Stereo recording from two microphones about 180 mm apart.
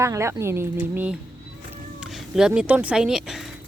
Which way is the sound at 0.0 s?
15° right (ahead or behind).